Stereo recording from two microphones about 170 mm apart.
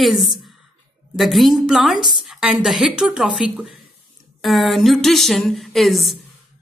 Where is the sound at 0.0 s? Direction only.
Centre (ahead or behind).